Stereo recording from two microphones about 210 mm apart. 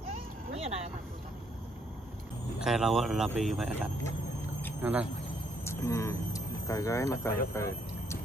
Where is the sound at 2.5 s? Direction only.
Centre (ahead or behind).